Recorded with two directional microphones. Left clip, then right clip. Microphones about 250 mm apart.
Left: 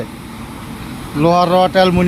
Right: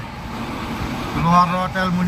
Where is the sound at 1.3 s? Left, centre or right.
Left.